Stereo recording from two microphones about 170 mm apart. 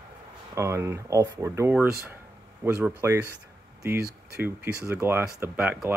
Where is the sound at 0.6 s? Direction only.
15° right (ahead or behind).